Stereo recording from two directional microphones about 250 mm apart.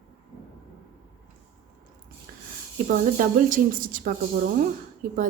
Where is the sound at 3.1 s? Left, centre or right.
Right.